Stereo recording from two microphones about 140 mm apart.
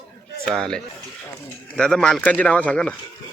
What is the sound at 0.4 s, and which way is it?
Speech, 5° left (ahead or behind).